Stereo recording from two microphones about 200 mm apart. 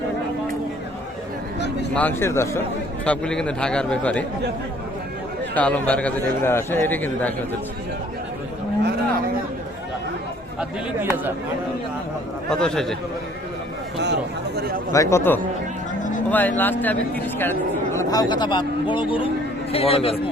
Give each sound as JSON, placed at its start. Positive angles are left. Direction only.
{"t": 2.0, "sound": "speech", "side_deg": 10}
{"t": 5.5, "sound": "speech", "side_deg": 5}
{"t": 10.6, "sound": "a man's voice", "side_deg": -10}
{"t": 12.5, "sound": "speech", "side_deg": 5}
{"t": 14.0, "sound": "chatter", "side_deg": -55}
{"t": 14.9, "sound": "a man's voice", "side_deg": 15}